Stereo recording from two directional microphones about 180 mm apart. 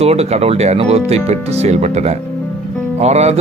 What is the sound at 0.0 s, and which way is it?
Speech, 35° right (ahead or behind).